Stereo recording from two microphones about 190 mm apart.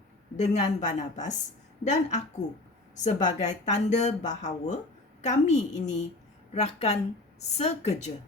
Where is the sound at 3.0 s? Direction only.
40° left (ahead or behind).